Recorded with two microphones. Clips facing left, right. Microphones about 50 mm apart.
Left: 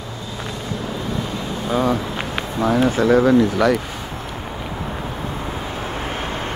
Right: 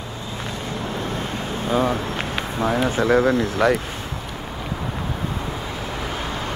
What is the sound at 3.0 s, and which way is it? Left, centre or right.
Speech, right.